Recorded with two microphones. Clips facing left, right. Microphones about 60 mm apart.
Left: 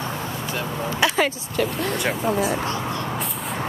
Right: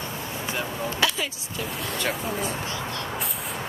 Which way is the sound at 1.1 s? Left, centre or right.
Left.